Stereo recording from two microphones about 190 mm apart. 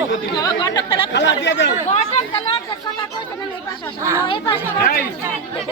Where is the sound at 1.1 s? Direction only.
70° left (ahead or behind).